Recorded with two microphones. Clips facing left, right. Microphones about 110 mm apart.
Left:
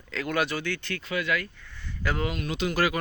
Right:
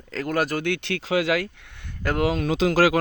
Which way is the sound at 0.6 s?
70° right (ahead or behind).